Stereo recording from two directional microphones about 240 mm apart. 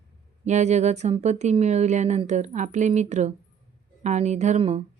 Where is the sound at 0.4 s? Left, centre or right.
Right.